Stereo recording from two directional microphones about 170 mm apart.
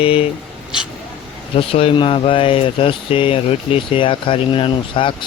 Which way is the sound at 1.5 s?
35° left (ahead or behind).